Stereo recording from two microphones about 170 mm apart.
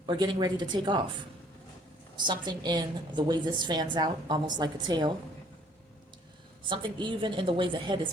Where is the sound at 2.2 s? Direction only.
25° right (ahead or behind).